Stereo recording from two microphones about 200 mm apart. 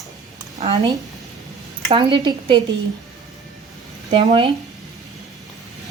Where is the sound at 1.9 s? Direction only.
25° right (ahead or behind).